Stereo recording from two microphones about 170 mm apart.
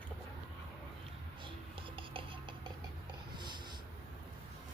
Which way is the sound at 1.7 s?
30° right (ahead or behind).